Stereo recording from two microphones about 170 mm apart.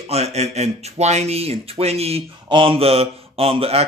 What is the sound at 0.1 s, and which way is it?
Speech, 40° right (ahead or behind).